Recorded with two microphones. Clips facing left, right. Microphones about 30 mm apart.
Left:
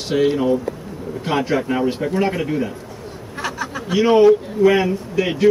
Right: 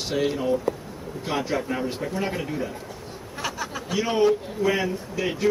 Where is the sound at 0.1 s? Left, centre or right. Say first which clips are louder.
Left 8 dB; left.